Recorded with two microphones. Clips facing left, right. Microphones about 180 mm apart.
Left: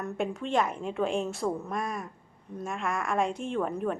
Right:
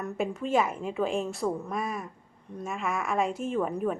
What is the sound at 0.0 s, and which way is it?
A woman's voice, centre (ahead or behind).